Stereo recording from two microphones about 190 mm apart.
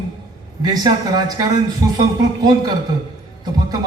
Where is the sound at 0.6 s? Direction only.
20° right (ahead or behind).